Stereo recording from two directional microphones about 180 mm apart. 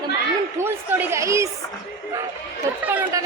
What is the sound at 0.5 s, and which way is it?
Speech, 15° right (ahead or behind).